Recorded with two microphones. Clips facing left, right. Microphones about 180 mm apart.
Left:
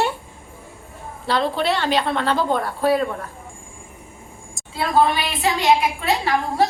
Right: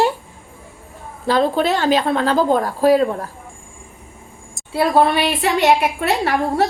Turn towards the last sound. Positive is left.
turn(degrees=-65)  # may be behind; listen again after turning